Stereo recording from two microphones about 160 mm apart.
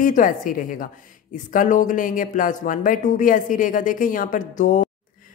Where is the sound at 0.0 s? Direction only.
55° left (ahead or behind).